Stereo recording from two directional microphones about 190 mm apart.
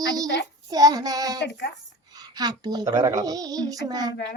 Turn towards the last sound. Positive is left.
turn(degrees=-20)  # may be behind; listen again after turning